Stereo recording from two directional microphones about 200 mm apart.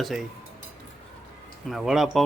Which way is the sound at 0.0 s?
Centre (ahead or behind).